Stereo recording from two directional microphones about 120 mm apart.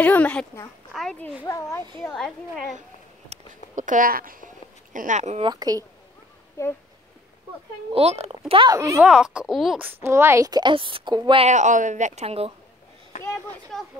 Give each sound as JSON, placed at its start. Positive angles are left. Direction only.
{"t": 0.0, "sound": "speech", "side_deg": 10}
{"t": 1.5, "sound": "a child's voice", "side_deg": 25}
{"t": 2.1, "sound": "speech", "side_deg": 5}
{"t": 3.3, "sound": "a sound", "side_deg": -65}
{"t": 3.7, "sound": "speech", "side_deg": -90}
{"t": 5.5, "sound": "a woman's voice", "side_deg": -30}
{"t": 6.6, "sound": "a child's voice", "side_deg": 20}
{"t": 7.9, "sound": "speech", "side_deg": -60}
{"t": 8.6, "sound": "a woman's voice", "side_deg": -25}
{"t": 9.0, "sound": "speech", "side_deg": -5}
{"t": 9.8, "sound": "a woman's voice", "side_deg": -15}
{"t": 10.5, "sound": "a woman's voice", "side_deg": -40}
{"t": 11.3, "sound": "speech", "side_deg": -80}
{"t": 13.7, "sound": "speech", "side_deg": 5}